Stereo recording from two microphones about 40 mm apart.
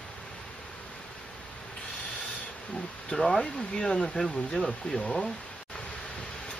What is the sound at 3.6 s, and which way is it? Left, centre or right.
Speech, left.